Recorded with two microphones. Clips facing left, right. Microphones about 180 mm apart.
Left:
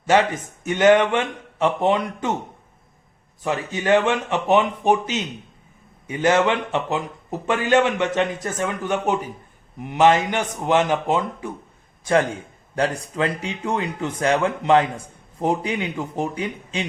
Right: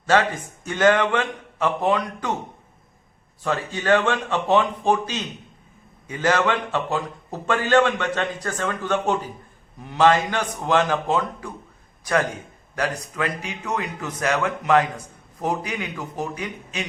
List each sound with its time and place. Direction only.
0.0 s speech: 20° left (ahead or behind)
3.4 s speech: 20° left (ahead or behind)